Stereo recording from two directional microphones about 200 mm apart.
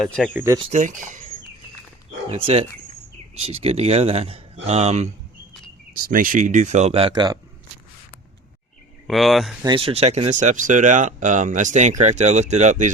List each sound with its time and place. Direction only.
0.0 s speech: 5° left (ahead or behind)
0.3 s speech: 15° right (ahead or behind)
0.6 s speech: 35° right (ahead or behind)
2.3 s speech: 30° right (ahead or behind)
5.9 s speech: 45° right (ahead or behind); by 7.3 s 20° right (ahead or behind)
9.0 s speech: centre (ahead or behind)
9.6 s speech: 25° right (ahead or behind)